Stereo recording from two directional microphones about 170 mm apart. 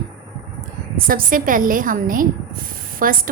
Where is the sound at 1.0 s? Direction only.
55° right (ahead or behind).